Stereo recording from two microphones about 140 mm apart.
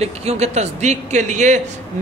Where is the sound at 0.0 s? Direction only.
50° right (ahead or behind).